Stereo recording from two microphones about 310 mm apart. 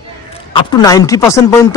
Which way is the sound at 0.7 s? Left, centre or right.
Centre.